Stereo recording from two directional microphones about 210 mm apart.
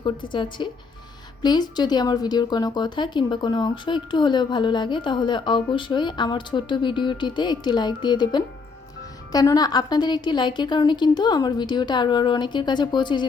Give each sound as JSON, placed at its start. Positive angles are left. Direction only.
{"t": 0.0, "sound": "speech", "side_deg": 20}